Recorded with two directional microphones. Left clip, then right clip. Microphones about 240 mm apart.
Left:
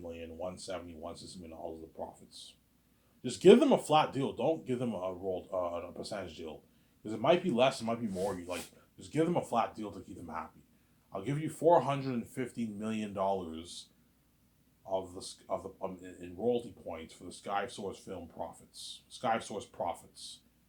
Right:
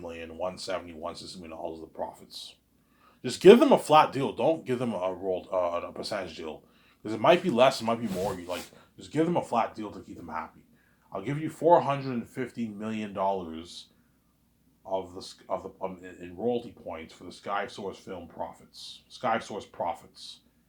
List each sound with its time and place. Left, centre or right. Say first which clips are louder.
0.0 s speech: right 7 dB; centre
14.8 s speech: right 4 dB; centre